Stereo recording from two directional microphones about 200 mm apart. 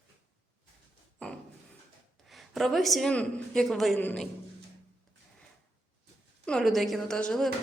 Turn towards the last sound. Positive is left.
turn(degrees=5)  # may be behind; listen again after turning